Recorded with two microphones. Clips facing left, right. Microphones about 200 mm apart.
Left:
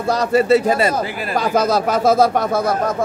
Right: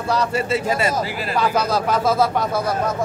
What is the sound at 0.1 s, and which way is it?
Speech, 40° left (ahead or behind).